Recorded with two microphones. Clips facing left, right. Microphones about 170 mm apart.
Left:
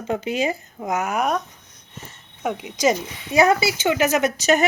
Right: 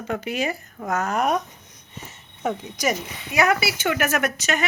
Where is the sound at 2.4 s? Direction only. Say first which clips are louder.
Even; 10° left (ahead or behind).